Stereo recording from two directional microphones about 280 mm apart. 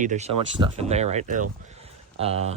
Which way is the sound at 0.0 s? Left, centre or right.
Right.